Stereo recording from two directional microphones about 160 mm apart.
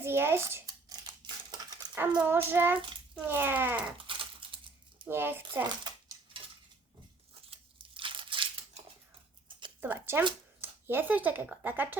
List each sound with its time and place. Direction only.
0.0 s a sound: 15° right (ahead or behind)
2.2 s child singing: 15° right (ahead or behind)
3.9 s typing: 30° right (ahead or behind)
5.0 s child singing: 15° right (ahead or behind)
5.6 s cutlery: 25° right (ahead or behind)
7.5 s tearing: 35° right (ahead or behind)
9.5 s a sound: 30° right (ahead or behind)
9.8 s child singing: 10° right (ahead or behind)
10.6 s speech: 15° right (ahead or behind)